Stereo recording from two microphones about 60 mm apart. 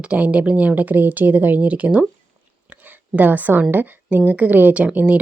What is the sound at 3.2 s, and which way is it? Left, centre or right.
A woman's voice, right.